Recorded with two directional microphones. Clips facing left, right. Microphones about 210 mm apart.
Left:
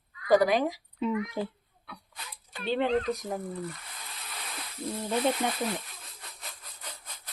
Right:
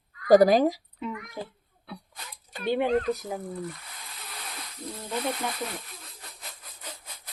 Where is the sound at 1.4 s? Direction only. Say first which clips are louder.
Left 5 dB; 35° right (ahead or behind).